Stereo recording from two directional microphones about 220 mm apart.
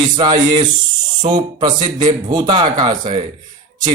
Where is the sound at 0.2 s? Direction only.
20° right (ahead or behind).